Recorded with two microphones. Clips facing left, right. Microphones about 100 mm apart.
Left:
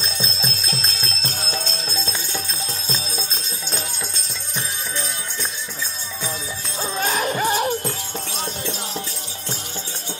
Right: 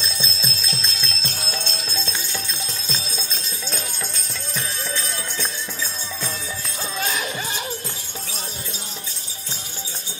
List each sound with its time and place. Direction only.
0.0 s jingle bell: 45° left (ahead or behind)
6.8 s music: 40° left (ahead or behind)